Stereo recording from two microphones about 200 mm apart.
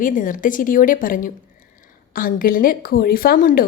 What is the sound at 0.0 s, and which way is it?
A woman's voice, 40° left (ahead or behind).